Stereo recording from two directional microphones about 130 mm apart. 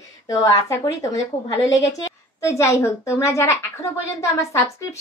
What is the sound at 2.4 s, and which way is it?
A woman's voice, 20° left (ahead or behind).